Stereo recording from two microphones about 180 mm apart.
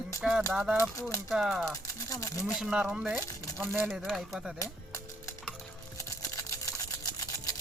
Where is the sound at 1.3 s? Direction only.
Centre (ahead or behind).